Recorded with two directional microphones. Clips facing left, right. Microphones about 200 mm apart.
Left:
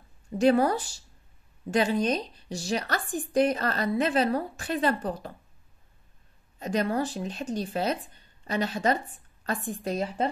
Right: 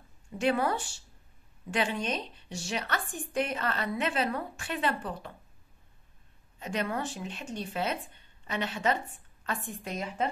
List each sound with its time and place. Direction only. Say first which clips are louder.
0.4 s speech: left 6 dB; 40° left (ahead or behind)
6.6 s speech: left 6 dB; 40° left (ahead or behind)